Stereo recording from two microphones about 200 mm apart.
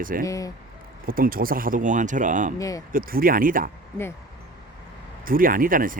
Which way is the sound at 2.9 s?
45° right (ahead or behind).